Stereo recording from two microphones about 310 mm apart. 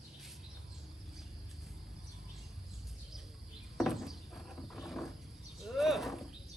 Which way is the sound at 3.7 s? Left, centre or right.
Centre.